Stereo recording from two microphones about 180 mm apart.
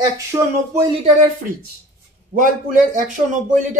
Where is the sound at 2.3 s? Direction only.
45° right (ahead or behind).